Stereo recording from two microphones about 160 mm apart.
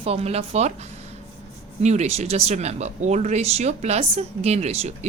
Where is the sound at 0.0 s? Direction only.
40° right (ahead or behind).